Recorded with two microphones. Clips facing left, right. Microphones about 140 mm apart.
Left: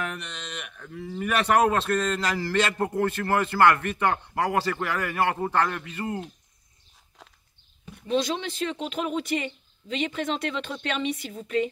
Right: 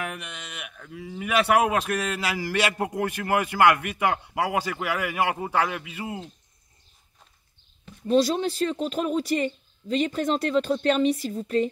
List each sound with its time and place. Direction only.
0.0 s speech: 10° right (ahead or behind)
7.2 s walk: 90° left
8.1 s speech: 40° right (ahead or behind)